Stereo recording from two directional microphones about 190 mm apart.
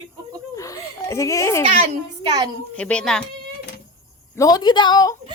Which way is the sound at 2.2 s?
20° right (ahead or behind).